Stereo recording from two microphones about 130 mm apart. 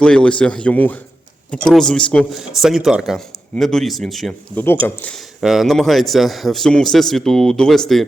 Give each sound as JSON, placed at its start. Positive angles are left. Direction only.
{"t": 0.0, "sound": "a man's voice", "side_deg": 5}
{"t": 4.5, "sound": "a man's voice", "side_deg": 15}
{"t": 5.4, "sound": "a man's voice", "side_deg": 0}